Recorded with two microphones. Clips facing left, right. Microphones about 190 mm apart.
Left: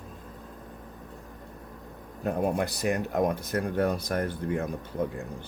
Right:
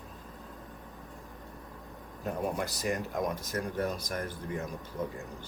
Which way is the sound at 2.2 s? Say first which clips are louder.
Left 6 dB; 60° left (ahead or behind).